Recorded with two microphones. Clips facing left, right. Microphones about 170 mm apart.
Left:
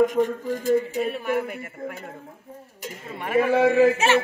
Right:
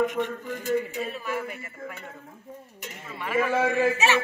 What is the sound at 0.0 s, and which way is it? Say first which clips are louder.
A man's voice: left 6 dB; 40° left (ahead or behind).